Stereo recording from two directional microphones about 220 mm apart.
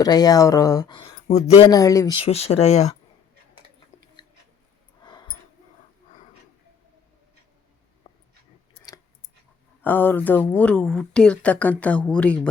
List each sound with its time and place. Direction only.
0.0 s speech: 15° left (ahead or behind)
8.1 s dog: 25° left (ahead or behind)
8.7 s a sound: 15° left (ahead or behind)
9.8 s speech: 10° left (ahead or behind)